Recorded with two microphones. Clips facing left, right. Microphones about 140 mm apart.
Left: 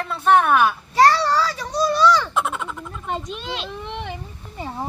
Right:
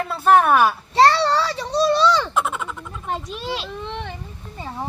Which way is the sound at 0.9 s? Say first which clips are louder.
Even; 25° right (ahead or behind).